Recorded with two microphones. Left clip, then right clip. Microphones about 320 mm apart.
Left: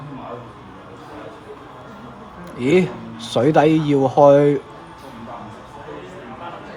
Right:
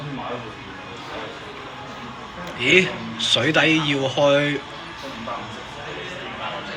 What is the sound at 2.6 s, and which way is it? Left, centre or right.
Speech, centre.